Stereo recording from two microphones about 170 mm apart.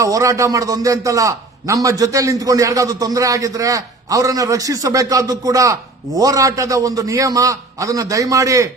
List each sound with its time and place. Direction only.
0.0 s a man's voice: 20° right (ahead or behind)